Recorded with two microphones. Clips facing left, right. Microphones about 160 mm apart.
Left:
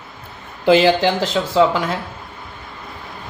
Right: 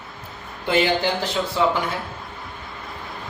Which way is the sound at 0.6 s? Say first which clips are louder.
Left 7 dB; 90° left.